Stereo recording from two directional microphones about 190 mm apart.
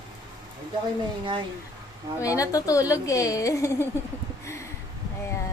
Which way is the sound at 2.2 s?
15° left (ahead or behind).